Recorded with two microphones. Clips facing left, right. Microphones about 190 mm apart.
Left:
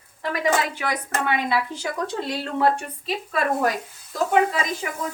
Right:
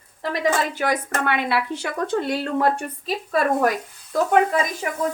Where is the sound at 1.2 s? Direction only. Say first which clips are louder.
Even; 65° right (ahead or behind); by 3.7 s 45° right (ahead or behind).